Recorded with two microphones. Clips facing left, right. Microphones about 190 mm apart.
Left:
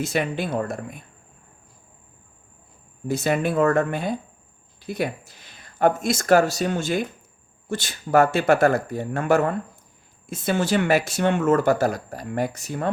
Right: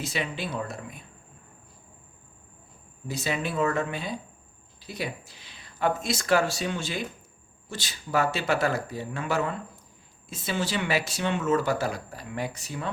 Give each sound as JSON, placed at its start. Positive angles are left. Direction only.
{"t": 0.0, "sound": "speech", "side_deg": 50}
{"t": 3.1, "sound": "speech", "side_deg": 50}